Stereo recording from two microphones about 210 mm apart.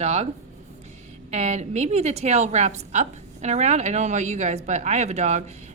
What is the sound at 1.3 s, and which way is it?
A woman's voice, 30° right (ahead or behind).